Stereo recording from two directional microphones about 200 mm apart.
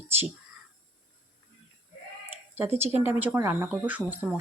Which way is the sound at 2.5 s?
10° right (ahead or behind).